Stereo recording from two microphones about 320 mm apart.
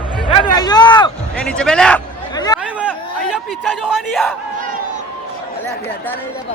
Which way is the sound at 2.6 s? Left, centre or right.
Centre.